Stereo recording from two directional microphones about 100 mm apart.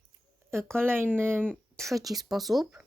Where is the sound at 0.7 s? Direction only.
20° right (ahead or behind).